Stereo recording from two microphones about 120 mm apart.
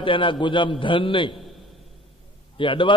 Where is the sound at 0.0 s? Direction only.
45° left (ahead or behind).